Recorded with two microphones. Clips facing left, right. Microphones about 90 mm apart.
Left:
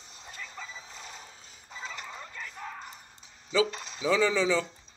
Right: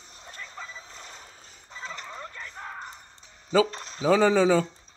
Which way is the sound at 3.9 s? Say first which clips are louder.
Right 5 dB; 40° right (ahead or behind).